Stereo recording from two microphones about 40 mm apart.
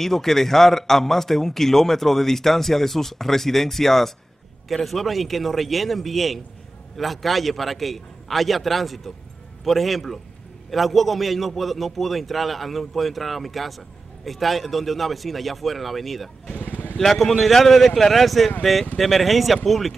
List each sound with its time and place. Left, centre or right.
0.0 s a man's voice: centre
16.6 s vehicle: left
17.0 s a man's voice: centre